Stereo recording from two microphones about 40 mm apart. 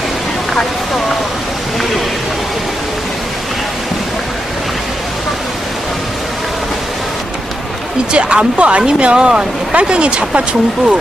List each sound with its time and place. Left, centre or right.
8.1 s speech: right